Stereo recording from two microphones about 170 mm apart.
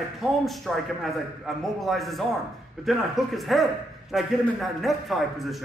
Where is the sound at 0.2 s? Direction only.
Centre (ahead or behind).